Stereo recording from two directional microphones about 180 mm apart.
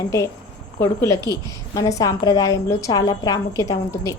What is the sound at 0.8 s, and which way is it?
A woman's voice, 15° left (ahead or behind).